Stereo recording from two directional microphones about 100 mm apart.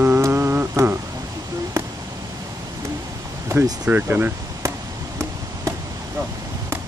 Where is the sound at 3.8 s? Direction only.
20° right (ahead or behind).